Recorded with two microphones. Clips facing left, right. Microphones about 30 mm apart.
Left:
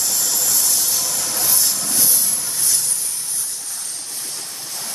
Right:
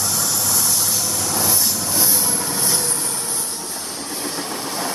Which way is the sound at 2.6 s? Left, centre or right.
Right.